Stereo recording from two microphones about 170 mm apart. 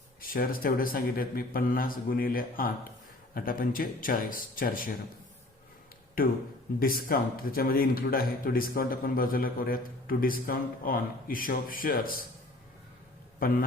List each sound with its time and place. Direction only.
0.2 s speech: 60° left (ahead or behind)
6.2 s speech: 55° left (ahead or behind)
13.4 s speech: 60° left (ahead or behind)